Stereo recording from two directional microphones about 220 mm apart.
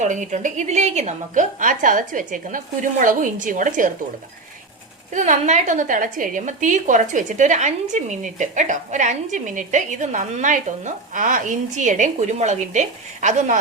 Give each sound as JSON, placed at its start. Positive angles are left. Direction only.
{"t": 0.0, "sound": "a woman's voice", "side_deg": -35}
{"t": 5.1, "sound": "a woman's voice", "side_deg": -35}